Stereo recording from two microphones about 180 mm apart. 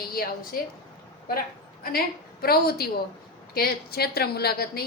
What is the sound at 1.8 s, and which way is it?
A woman's voice, 55° left (ahead or behind).